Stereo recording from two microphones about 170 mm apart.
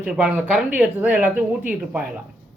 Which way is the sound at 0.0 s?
5° right (ahead or behind).